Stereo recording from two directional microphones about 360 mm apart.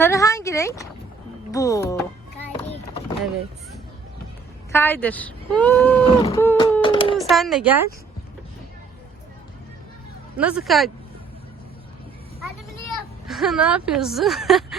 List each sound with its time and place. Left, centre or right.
0.0 s a sound: centre
1.5 s speech: centre
4.7 s speech: centre
6.1 s a sound: centre
7.2 s speech: centre
10.3 s speech: centre
13.2 s speech: centre